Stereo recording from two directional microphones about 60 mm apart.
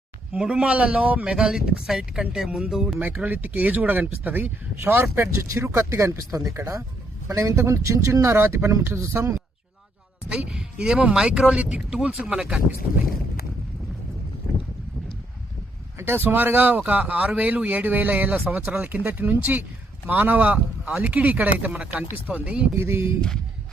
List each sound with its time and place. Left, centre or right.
0.3 s speech: centre
3.2 s speech: right
5.1 s a man's voice: right
9.0 s a man's voice: right
10.2 s speech: centre
12.8 s speech: right
16.0 s speech: right; by 22.6 s centre
22.7 s speech: right